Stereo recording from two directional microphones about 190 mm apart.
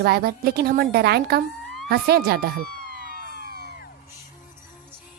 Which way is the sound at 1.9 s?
55° right (ahead or behind).